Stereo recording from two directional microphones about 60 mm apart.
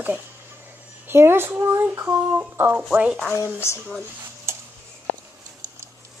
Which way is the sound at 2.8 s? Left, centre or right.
Centre.